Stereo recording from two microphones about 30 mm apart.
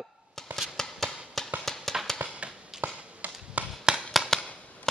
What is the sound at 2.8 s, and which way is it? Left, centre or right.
Tap, right.